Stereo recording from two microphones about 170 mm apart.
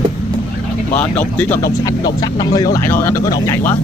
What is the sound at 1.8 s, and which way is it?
Speech, 25° left (ahead or behind).